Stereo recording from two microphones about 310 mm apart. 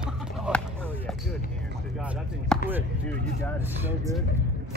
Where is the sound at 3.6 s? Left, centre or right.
Centre.